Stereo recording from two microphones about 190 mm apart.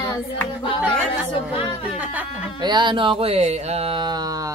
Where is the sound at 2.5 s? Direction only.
25° right (ahead or behind).